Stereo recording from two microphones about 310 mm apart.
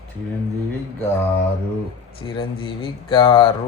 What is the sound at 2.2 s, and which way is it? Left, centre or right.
Speech, centre.